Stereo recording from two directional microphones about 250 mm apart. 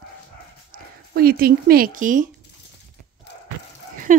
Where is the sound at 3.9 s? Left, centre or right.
Right.